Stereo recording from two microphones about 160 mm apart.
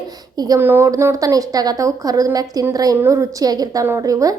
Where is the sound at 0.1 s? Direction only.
25° right (ahead or behind).